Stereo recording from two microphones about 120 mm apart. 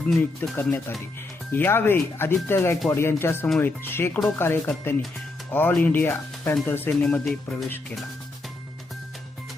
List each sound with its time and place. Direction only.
0.0 s speech: 5° left (ahead or behind)
6.9 s speech: 5° left (ahead or behind)